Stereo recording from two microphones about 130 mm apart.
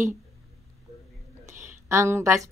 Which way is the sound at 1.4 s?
20° right (ahead or behind).